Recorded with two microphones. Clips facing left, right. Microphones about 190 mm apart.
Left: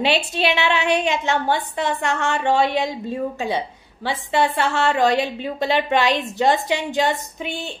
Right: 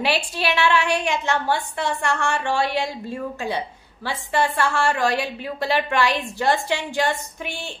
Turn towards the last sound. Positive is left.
turn(degrees=20)  # may be behind; listen again after turning